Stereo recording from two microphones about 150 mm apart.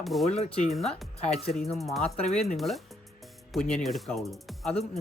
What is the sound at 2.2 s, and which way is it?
Speech, 45° left (ahead or behind).